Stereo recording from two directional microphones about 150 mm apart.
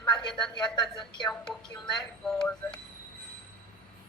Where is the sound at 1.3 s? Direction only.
5° left (ahead or behind).